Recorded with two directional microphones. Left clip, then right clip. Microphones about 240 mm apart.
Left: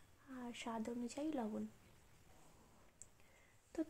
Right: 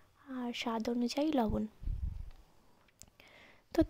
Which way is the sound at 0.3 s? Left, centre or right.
Right.